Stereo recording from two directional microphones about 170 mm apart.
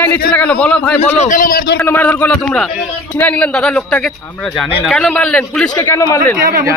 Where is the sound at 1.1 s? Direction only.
45° left (ahead or behind).